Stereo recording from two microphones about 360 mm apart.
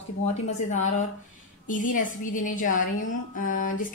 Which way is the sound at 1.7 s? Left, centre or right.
Left.